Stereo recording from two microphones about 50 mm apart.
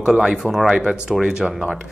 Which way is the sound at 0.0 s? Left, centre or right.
Centre.